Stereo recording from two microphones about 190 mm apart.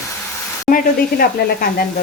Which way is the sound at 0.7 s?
50° left (ahead or behind).